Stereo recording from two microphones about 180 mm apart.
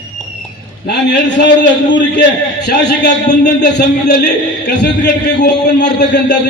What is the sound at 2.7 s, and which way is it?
A man's voice, 70° left (ahead or behind).